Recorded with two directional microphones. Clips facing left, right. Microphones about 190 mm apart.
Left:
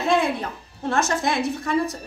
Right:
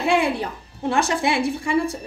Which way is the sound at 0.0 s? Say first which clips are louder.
Right 1 dB; 10° right (ahead or behind).